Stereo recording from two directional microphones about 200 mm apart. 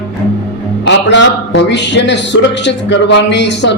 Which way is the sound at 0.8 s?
65° left (ahead or behind).